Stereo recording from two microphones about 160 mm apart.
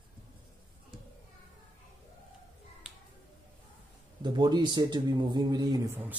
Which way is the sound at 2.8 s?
5° right (ahead or behind).